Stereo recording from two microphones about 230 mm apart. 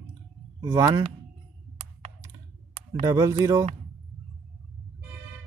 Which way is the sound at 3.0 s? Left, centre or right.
Centre.